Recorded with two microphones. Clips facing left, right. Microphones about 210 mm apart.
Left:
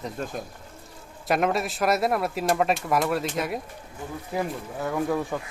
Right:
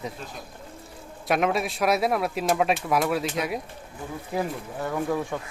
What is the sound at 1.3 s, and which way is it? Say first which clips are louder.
Speech: even; centre (ahead or behind).